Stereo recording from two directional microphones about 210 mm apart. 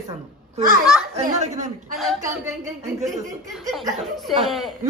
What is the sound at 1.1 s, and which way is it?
Speech, 35° right (ahead or behind).